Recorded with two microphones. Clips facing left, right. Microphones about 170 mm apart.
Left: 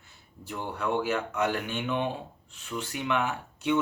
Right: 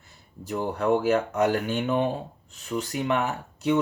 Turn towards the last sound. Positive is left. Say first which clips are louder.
# right 3 dB
turn(degrees=-40)  # may be behind; listen again after turning